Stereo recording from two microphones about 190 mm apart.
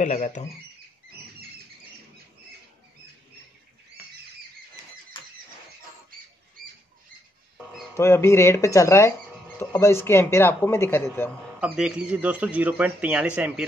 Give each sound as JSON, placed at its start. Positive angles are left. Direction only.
{"t": 0.0, "sound": "speech", "side_deg": 40}
{"t": 7.9, "sound": "speech", "side_deg": 15}
{"t": 11.6, "sound": "speech", "side_deg": -5}